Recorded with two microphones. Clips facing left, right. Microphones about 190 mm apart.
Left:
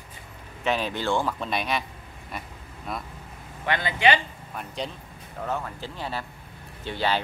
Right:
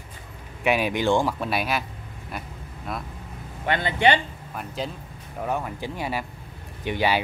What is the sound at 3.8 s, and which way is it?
Speech, 30° right (ahead or behind).